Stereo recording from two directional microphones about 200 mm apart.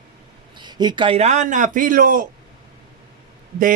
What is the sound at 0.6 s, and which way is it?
A man's voice, 20° right (ahead or behind).